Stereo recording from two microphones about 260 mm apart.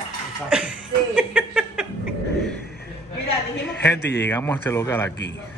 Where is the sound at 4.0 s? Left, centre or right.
Left.